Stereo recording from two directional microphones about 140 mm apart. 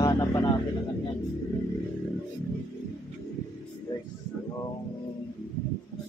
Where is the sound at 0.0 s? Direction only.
25° left (ahead or behind).